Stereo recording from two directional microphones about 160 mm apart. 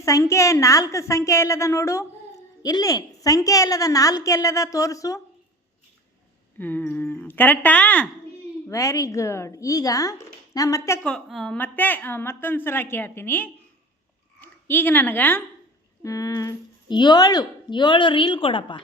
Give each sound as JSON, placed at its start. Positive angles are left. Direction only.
{"t": 0.0, "sound": "a woman's voice", "side_deg": 20}
{"t": 6.6, "sound": "a woman's voice", "side_deg": 10}
{"t": 11.0, "sound": "a woman's voice", "side_deg": 0}